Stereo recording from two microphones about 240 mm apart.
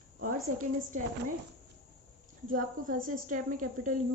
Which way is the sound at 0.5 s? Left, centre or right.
Right.